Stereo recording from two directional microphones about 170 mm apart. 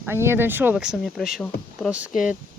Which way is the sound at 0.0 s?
15° right (ahead or behind).